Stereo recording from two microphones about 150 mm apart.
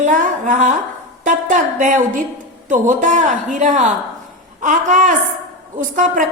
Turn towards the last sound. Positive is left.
turn(degrees=-60)  # may be behind; listen again after turning